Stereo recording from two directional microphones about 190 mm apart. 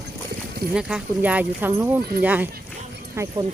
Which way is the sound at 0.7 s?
5° right (ahead or behind).